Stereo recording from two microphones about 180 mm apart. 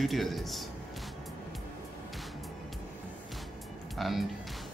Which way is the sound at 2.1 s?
Centre (ahead or behind).